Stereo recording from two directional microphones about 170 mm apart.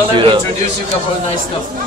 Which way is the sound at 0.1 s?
30° right (ahead or behind).